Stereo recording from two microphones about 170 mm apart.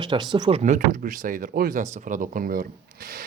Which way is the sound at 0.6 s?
50° right (ahead or behind).